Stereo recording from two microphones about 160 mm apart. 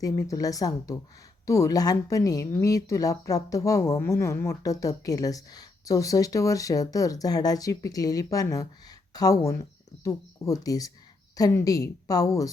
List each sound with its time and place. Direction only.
0.0 s a woman's voice: 20° left (ahead or behind)